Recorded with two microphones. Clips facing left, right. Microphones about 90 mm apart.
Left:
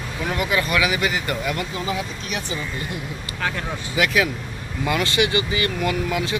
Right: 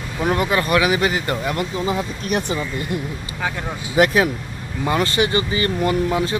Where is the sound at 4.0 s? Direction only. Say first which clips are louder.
Right 5 dB; 40° right (ahead or behind).